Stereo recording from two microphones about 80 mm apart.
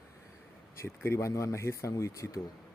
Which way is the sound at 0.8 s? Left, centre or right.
Left.